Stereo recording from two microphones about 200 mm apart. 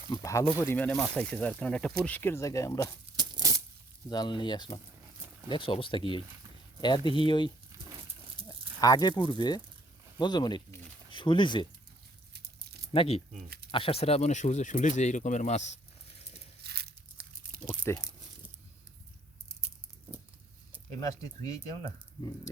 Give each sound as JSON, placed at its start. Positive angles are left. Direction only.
{"t": 0.1, "sound": "speech", "side_deg": 20}
{"t": 3.2, "sound": "a sound", "side_deg": -20}
{"t": 4.1, "sound": "speech", "side_deg": 20}
{"t": 8.8, "sound": "speech", "side_deg": 20}
{"t": 12.9, "sound": "speech", "side_deg": 30}
{"t": 16.6, "sound": "tearing", "side_deg": -50}
{"t": 17.7, "sound": "a sound", "side_deg": 15}
{"t": 21.0, "sound": "speech", "side_deg": 15}